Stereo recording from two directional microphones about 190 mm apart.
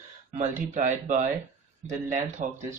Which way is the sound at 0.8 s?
40° right (ahead or behind).